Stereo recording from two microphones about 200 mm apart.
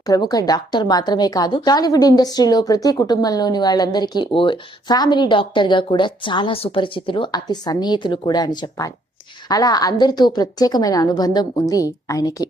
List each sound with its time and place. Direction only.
0.0 s a woman's voice: 20° left (ahead or behind)